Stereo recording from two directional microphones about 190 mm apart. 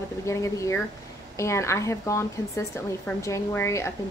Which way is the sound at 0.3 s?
15° left (ahead or behind).